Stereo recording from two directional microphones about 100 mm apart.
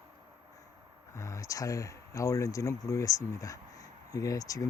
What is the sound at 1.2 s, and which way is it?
Speech, 35° left (ahead or behind).